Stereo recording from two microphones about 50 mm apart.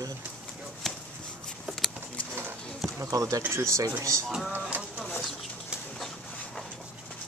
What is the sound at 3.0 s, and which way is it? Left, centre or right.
Speech, right.